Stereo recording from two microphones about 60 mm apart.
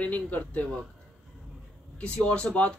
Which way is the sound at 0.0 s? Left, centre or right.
Left.